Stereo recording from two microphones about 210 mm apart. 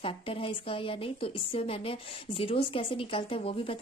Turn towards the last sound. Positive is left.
turn(degrees=25)  # may be behind; listen again after turning